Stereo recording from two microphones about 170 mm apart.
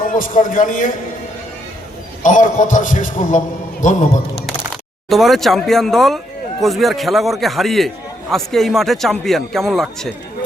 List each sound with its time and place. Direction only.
0.0 s a man's voice: 50° left (ahead or behind)
2.2 s a man's voice: 50° left (ahead or behind)
5.0 s speech: centre (ahead or behind)